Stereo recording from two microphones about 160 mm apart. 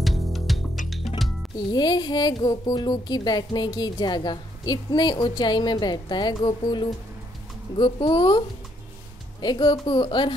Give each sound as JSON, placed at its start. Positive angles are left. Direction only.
{"t": 0.0, "sound": "music", "side_deg": 0}
{"t": 1.7, "sound": "speech", "side_deg": 25}